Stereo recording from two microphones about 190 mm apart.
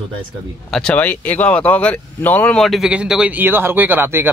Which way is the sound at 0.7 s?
5° left (ahead or behind).